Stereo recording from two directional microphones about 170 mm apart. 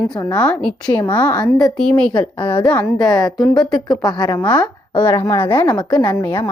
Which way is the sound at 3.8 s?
20° left (ahead or behind).